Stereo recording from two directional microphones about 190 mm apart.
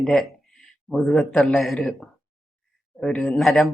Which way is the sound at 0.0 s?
Centre (ahead or behind).